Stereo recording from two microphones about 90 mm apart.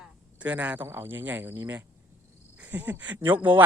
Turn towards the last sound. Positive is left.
turn(degrees=-20)  # may be behind; listen again after turning